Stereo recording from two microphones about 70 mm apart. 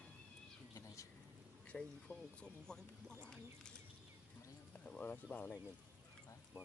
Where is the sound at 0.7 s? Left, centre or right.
Left.